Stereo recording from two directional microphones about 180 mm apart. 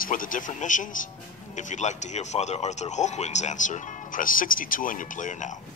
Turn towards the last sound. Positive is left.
turn(degrees=45)  # may be behind; listen again after turning